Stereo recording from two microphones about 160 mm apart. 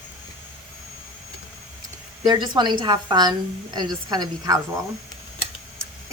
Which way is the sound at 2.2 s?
30° right (ahead or behind).